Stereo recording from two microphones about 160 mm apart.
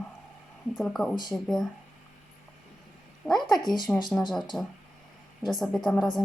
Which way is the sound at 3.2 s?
Centre (ahead or behind).